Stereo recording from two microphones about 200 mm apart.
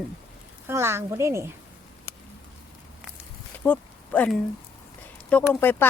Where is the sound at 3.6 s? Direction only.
5° left (ahead or behind).